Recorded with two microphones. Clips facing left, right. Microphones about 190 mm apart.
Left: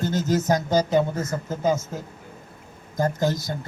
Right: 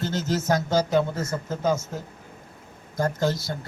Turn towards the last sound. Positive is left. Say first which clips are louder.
# left 1 dB
turn(degrees=20)  # may be behind; listen again after turning